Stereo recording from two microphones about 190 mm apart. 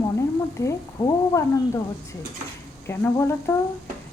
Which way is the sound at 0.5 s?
15° left (ahead or behind).